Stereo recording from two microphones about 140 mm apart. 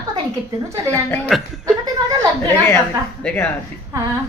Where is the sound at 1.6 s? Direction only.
30° right (ahead or behind).